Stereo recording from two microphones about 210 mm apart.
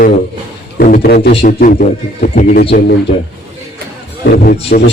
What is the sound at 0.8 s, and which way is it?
A man's voice, 45° left (ahead or behind).